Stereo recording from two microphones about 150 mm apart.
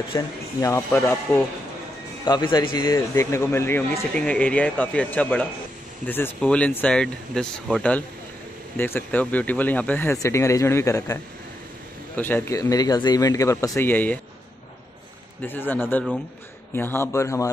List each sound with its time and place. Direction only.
0.1 s speech: 20° left (ahead or behind)
2.2 s speech: 30° left (ahead or behind)
12.2 s speech: 15° left (ahead or behind)
15.4 s speech: 15° left (ahead or behind)